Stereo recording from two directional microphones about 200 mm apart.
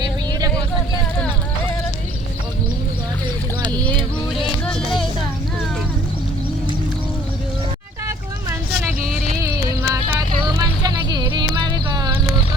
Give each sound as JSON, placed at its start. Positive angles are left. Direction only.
{"t": 4.6, "sound": "music", "side_deg": 0}
{"t": 9.4, "sound": "vehicle", "side_deg": -15}